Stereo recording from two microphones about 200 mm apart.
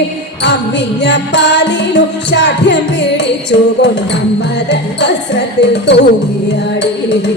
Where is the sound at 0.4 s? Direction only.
60° left (ahead or behind).